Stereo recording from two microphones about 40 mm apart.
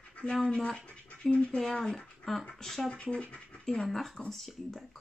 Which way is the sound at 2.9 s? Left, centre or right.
Left.